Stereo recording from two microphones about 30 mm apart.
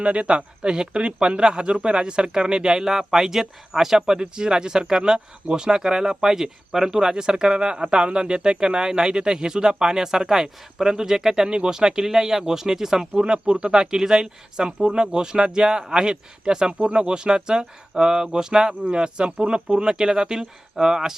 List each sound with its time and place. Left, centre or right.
0.0 s speech: right; by 13.2 s centre
13.2 s speech: right
19.6 s speech: right